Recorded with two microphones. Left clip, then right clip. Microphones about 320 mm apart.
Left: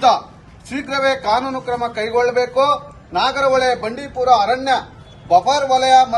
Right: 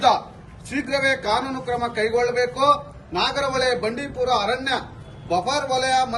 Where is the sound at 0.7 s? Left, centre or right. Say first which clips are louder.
Left 3 dB; centre.